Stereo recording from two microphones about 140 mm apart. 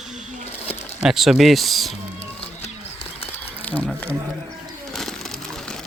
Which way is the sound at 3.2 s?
10° left (ahead or behind).